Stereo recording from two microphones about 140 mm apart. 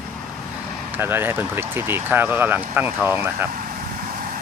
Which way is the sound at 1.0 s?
15° right (ahead or behind).